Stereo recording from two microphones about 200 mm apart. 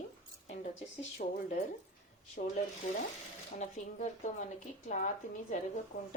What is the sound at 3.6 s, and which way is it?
Dishes, 35° left (ahead or behind).